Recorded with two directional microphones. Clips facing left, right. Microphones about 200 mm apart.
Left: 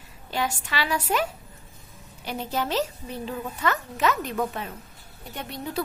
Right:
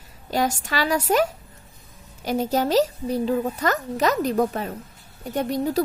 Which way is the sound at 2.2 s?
40° right (ahead or behind).